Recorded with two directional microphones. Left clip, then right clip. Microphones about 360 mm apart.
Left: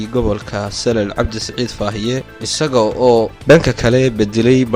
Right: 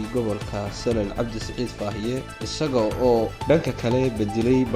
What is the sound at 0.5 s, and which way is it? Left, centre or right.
Speech, left.